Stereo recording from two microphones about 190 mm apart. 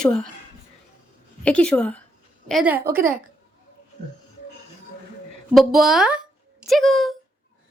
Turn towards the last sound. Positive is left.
turn(degrees=0)  # may be behind; listen again after turning